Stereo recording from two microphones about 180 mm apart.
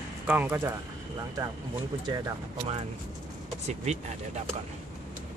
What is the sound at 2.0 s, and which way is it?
Speech, 25° right (ahead or behind).